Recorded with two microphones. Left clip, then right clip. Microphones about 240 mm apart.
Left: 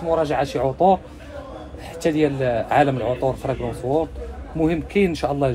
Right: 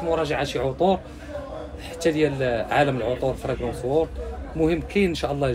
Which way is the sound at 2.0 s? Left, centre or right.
Centre.